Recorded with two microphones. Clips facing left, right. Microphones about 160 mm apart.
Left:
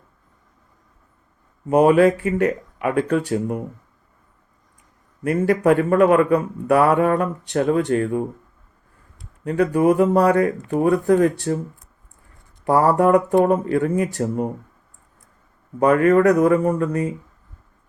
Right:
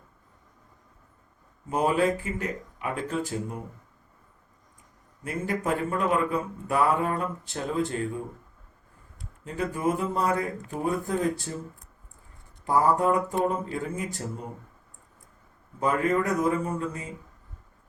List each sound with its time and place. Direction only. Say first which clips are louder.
1.7 s speech: left 10 dB; 65° left (ahead or behind)
5.2 s speech: left 12 dB; 70° left (ahead or behind)
9.4 s speech: left 11 dB; 70° left (ahead or behind)
15.8 s speech: left 10 dB; 70° left (ahead or behind)